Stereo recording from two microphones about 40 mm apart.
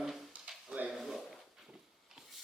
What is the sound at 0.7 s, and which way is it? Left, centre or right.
Speech, right.